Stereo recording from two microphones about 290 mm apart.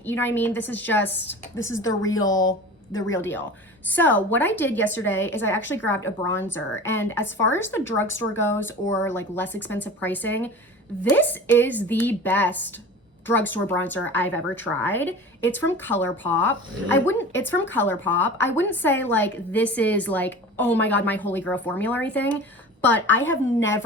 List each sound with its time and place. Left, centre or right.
0.0 s a woman's voice: centre
8.1 s speech: left
8.5 s a woman's voice: centre